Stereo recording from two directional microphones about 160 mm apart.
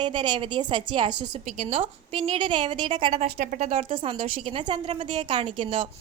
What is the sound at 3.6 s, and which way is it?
Speech, 45° right (ahead or behind).